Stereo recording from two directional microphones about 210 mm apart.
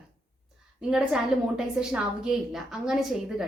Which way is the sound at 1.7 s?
5° right (ahead or behind).